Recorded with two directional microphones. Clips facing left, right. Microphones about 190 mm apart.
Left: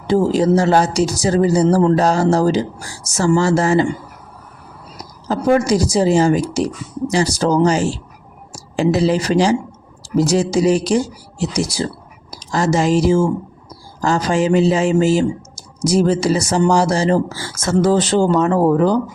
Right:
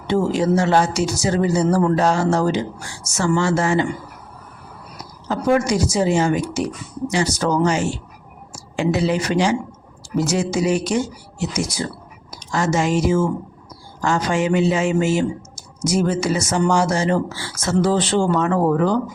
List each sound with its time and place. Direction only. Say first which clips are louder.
0.1 s a man's voice: left 4 dB; 35° left (ahead or behind)
5.3 s a man's voice: left 3 dB; 35° left (ahead or behind)